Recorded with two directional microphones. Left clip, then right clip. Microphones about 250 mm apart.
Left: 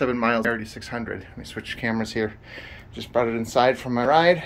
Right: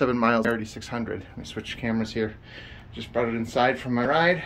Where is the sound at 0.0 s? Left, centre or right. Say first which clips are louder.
Even; centre.